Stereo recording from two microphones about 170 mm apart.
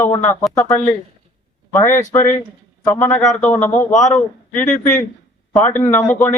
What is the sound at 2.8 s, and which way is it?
Speech, 10° left (ahead or behind).